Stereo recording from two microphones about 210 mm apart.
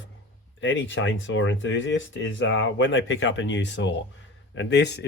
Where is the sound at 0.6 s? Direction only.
65° left (ahead or behind).